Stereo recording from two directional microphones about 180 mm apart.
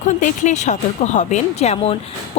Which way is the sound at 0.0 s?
45° left (ahead or behind).